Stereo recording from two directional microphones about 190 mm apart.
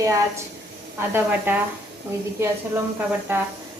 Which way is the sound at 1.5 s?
10° right (ahead or behind).